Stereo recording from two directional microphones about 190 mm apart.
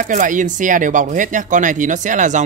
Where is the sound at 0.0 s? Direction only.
45° right (ahead or behind).